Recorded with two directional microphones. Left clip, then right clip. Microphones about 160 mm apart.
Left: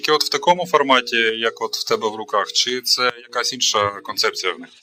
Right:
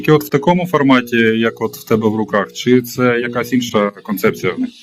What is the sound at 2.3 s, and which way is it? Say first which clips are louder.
A man's voice: right 2 dB; 40° left (ahead or behind).